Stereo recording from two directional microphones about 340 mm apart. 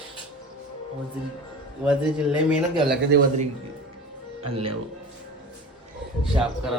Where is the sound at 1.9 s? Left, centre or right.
Centre.